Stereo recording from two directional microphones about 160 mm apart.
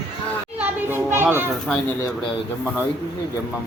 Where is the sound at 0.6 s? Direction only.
15° right (ahead or behind).